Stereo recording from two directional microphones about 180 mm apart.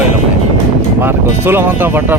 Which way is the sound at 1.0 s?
10° right (ahead or behind).